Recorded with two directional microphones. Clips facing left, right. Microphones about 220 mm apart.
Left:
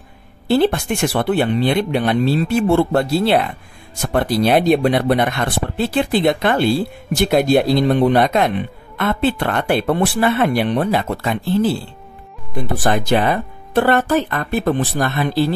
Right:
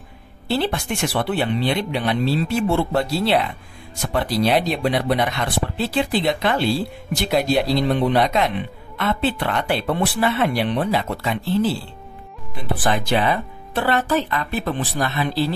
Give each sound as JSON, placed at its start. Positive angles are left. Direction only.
{"t": 0.5, "sound": "speech", "side_deg": 50}